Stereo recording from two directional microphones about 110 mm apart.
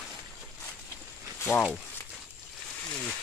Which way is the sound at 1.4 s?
20° left (ahead or behind).